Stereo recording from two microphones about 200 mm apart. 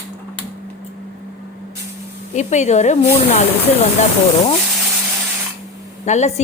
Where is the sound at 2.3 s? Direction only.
35° left (ahead or behind).